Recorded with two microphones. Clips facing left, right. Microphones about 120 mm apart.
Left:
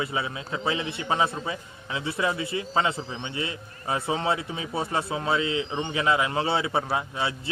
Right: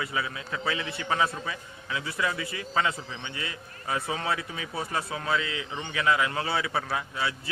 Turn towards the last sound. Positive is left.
turn(degrees=25)  # may be behind; listen again after turning